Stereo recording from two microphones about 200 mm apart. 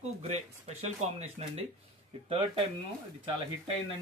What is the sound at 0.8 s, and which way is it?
Speech, 35° right (ahead or behind).